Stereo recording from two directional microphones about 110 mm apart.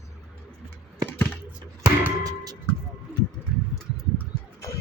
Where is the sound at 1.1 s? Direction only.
15° left (ahead or behind).